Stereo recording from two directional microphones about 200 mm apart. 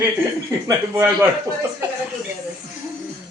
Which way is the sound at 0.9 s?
10° right (ahead or behind).